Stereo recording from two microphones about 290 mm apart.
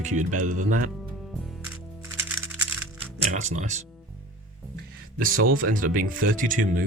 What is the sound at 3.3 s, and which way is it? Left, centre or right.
Speech, right.